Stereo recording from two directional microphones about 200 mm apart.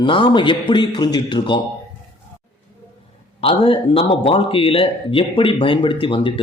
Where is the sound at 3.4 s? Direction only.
25° left (ahead or behind).